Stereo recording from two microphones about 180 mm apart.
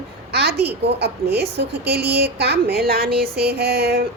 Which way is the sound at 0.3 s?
65° right (ahead or behind).